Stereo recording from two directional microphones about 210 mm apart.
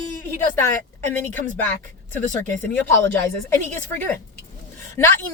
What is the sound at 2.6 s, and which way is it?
Speech, 10° left (ahead or behind).